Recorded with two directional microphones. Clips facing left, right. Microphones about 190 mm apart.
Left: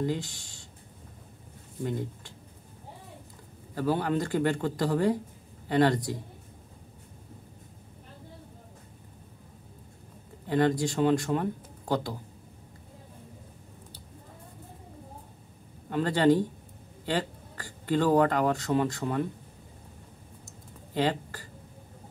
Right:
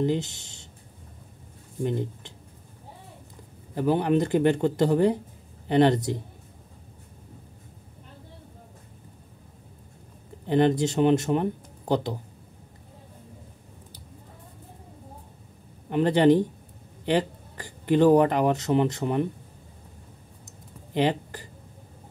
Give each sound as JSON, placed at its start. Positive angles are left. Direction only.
{"t": 0.0, "sound": "speech", "side_deg": -25}
{"t": 1.8, "sound": "speech", "side_deg": -20}
{"t": 3.7, "sound": "speech", "side_deg": -20}
{"t": 10.4, "sound": "speech", "side_deg": -25}
{"t": 15.9, "sound": "speech", "side_deg": -20}
{"t": 20.4, "sound": "a sound", "side_deg": -20}